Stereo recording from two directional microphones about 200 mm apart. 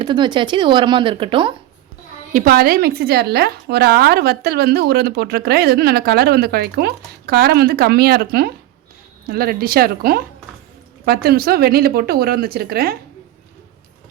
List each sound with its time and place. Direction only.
0.0 s speech: 25° right (ahead or behind)
2.3 s a woman's voice: 45° right (ahead or behind)